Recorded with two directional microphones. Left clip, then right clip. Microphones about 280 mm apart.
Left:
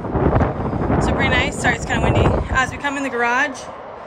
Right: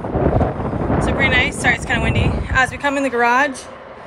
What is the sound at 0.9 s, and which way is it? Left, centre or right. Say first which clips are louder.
A woman's voice: right 2 dB; centre.